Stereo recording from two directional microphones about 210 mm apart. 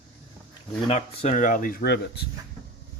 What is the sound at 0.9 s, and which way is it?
Speech, 30° left (ahead or behind).